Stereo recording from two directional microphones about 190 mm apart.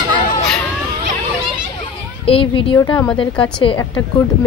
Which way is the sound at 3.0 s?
5° left (ahead or behind).